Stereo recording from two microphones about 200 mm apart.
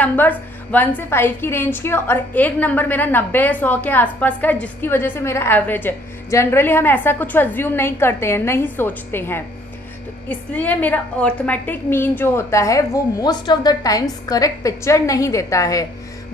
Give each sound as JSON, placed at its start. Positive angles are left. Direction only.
{"t": 0.0, "sound": "a woman's voice", "side_deg": 10}